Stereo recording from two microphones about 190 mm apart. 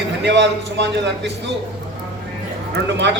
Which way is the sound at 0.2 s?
65° right (ahead or behind).